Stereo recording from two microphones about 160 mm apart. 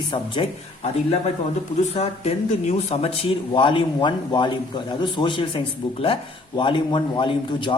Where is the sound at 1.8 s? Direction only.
45° left (ahead or behind).